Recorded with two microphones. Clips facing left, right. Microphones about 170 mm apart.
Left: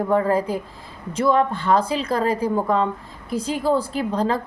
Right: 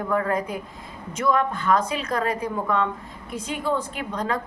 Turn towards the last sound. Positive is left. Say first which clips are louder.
# left 6 dB
turn(degrees=30)  # may be behind; listen again after turning